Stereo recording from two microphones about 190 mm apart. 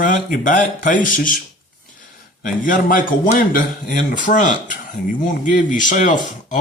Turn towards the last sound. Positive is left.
turn(degrees=40)  # may be behind; listen again after turning